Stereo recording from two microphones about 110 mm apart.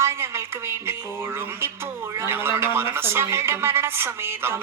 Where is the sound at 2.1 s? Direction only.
20° right (ahead or behind).